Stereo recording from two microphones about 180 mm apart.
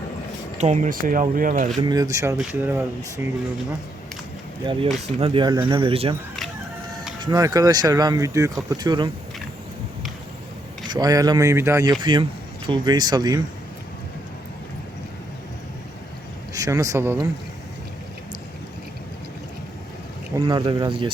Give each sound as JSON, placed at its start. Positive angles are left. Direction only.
{"t": 0.6, "sound": "speech", "side_deg": -40}
{"t": 1.8, "sound": "speech", "side_deg": -20}
{"t": 4.6, "sound": "speech", "side_deg": -25}
{"t": 7.3, "sound": "speech", "side_deg": -20}
{"t": 10.8, "sound": "speech", "side_deg": -25}
{"t": 16.6, "sound": "speech", "side_deg": -20}
{"t": 20.3, "sound": "speech", "side_deg": -25}